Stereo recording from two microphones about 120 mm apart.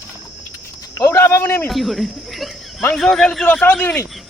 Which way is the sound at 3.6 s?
15° left (ahead or behind).